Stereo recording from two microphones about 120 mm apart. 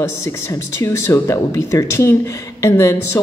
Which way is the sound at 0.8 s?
25° left (ahead or behind).